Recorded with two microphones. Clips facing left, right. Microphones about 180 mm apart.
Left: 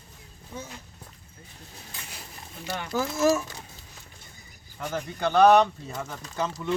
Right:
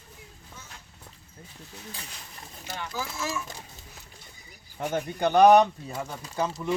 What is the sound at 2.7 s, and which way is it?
Speech, 55° left (ahead or behind).